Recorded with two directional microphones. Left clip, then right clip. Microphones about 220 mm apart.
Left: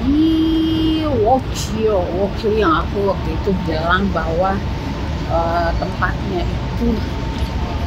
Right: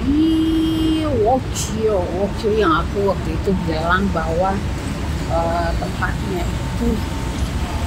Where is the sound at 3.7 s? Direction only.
Centre (ahead or behind).